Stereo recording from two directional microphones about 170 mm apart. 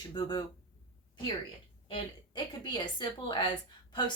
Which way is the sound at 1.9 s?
25° left (ahead or behind).